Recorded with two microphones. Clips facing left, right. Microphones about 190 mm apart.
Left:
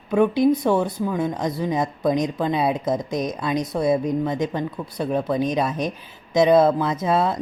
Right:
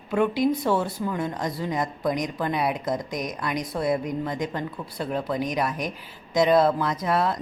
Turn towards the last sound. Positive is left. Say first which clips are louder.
# left 3 dB
turn(degrees=25)  # may be behind; listen again after turning